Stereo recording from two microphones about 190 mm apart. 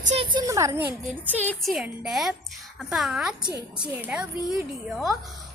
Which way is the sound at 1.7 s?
5° right (ahead or behind).